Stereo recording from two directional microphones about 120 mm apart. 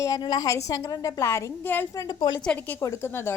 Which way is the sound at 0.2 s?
35° left (ahead or behind).